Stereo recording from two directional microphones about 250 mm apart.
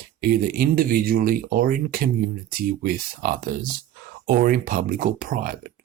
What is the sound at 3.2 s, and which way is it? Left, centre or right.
Speech, right.